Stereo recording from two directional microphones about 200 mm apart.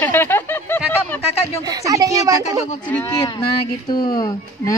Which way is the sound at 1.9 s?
15° right (ahead or behind).